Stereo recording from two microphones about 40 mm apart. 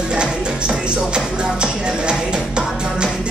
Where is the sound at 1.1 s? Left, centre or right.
Right.